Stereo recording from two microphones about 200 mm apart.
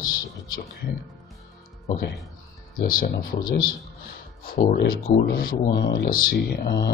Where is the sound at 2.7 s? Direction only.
45° left (ahead or behind).